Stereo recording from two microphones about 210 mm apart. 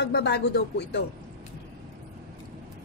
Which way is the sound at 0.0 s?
55° left (ahead or behind).